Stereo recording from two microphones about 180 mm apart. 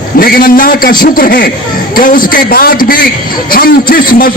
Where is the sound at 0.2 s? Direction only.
50° left (ahead or behind).